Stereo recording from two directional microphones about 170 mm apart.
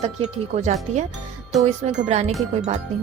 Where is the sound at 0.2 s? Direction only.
45° right (ahead or behind).